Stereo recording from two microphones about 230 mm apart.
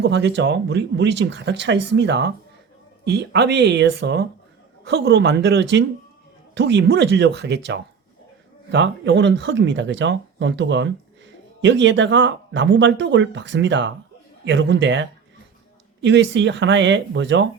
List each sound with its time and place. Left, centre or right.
0.0 s speech: right